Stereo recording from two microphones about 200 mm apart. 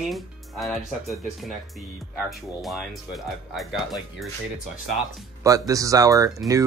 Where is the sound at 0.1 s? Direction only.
Centre (ahead or behind).